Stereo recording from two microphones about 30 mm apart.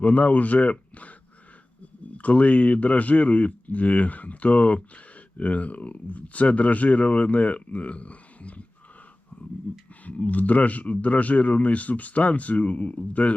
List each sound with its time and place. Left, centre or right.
0.0 s speech: left
2.1 s speech: left
9.7 s speech: left
10.1 s speech: left